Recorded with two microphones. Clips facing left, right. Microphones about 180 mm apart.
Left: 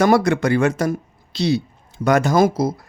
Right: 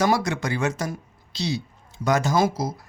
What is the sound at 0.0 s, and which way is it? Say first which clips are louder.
Speech: left 7 dB; 60° left (ahead or behind).